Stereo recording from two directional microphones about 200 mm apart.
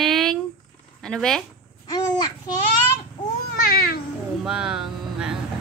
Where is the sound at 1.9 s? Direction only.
20° left (ahead or behind).